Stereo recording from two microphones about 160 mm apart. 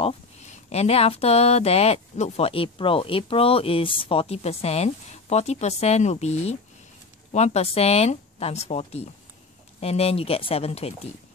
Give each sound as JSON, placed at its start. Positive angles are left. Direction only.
{"t": 0.0, "sound": "speech", "side_deg": 40}